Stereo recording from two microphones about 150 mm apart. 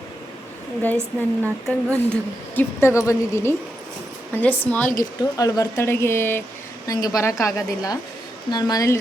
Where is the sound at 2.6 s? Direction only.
20° left (ahead or behind).